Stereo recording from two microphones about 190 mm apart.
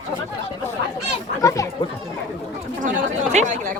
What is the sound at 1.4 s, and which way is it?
Speech, 15° left (ahead or behind).